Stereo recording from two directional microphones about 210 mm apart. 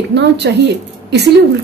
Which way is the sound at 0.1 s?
55° right (ahead or behind).